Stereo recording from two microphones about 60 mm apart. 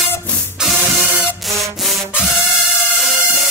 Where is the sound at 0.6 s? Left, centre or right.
Centre.